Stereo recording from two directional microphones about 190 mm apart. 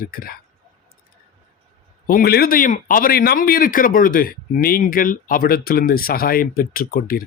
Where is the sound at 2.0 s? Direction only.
50° left (ahead or behind).